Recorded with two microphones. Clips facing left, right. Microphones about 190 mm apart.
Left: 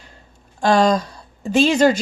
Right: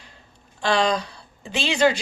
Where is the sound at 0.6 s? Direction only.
45° left (ahead or behind).